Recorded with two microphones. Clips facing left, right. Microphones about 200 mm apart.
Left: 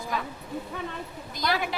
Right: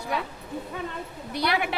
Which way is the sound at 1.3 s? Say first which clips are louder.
Right 2 dB; 65° right (ahead or behind).